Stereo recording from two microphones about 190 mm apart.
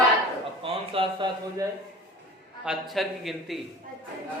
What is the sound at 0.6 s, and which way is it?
A man's voice, 30° right (ahead or behind).